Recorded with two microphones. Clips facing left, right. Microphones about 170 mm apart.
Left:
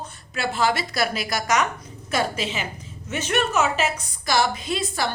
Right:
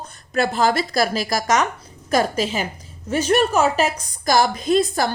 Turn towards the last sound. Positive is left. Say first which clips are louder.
# right 8 dB
turn(degrees=-45)  # may be behind; listen again after turning